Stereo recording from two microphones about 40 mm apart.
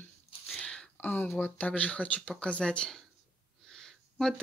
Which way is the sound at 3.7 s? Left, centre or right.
Centre.